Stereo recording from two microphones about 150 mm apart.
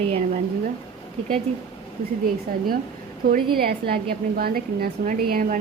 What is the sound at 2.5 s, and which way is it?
A woman's voice, 90° right.